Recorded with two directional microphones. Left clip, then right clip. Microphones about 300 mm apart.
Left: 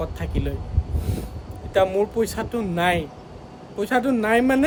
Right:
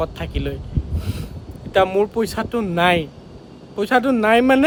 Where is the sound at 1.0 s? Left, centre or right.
Centre.